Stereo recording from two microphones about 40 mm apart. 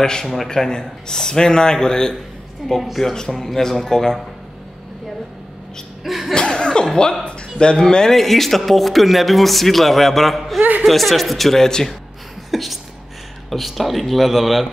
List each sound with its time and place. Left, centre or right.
0.0 s a man's voice: centre
2.6 s a man's voice: centre
3.0 s a man's voice: centre
6.0 s cough: centre
6.3 s laughter: left
6.9 s a woman's voice: centre
7.2 s a sound: left
7.7 s a man's voice: centre
8.2 s a man's voice: centre
12.4 s a man's voice: centre